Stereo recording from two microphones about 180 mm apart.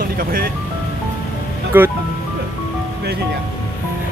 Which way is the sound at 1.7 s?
10° right (ahead or behind).